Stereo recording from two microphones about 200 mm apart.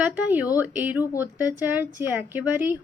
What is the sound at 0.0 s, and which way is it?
A woman's voice, 10° right (ahead or behind).